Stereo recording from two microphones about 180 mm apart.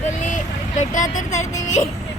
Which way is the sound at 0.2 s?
45° left (ahead or behind).